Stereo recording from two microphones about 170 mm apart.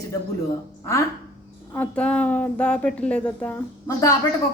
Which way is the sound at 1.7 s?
10° left (ahead or behind).